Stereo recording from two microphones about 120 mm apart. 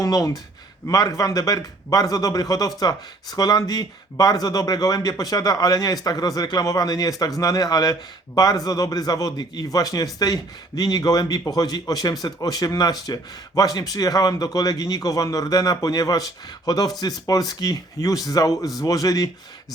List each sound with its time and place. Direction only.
0.0 s speech: 30° left (ahead or behind)